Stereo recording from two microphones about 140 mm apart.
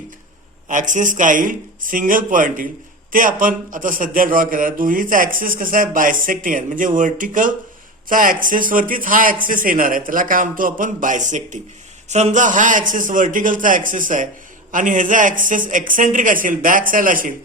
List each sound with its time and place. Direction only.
0.7 s a man's voice: 65° right (ahead or behind)